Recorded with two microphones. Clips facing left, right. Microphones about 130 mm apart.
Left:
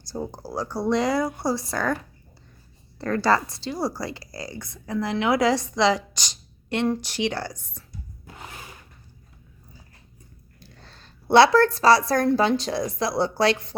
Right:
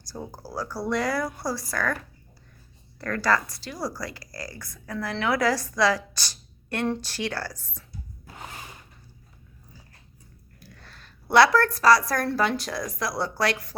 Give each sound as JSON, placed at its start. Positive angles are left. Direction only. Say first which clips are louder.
{"t": 0.3, "sound": "speech", "louder": "left 3 dB", "side_deg": 20}
{"t": 3.0, "sound": "speech", "louder": "left 3 dB", "side_deg": 25}
{"t": 10.6, "sound": "a woman's voice", "louder": "even", "side_deg": 30}